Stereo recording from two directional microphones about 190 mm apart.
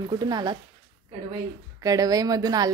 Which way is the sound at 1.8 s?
20° right (ahead or behind).